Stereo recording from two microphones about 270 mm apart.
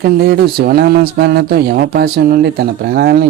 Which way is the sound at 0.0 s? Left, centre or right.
Right.